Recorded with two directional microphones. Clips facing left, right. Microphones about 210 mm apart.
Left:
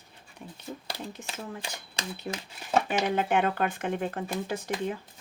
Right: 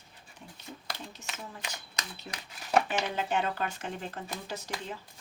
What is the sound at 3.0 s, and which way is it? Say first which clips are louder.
Speech: left 5 dB; 55° left (ahead or behind).